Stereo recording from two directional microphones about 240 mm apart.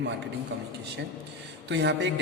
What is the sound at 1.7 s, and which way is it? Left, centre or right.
Mantra, right.